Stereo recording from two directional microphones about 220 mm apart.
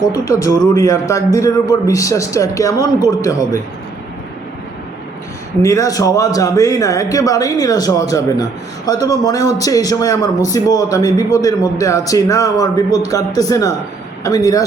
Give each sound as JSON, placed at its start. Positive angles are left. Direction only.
{"t": 0.1, "sound": "a man's voice", "side_deg": 15}
{"t": 5.6, "sound": "a man's voice", "side_deg": 15}